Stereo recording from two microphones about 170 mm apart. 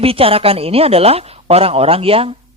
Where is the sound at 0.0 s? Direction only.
35° right (ahead or behind).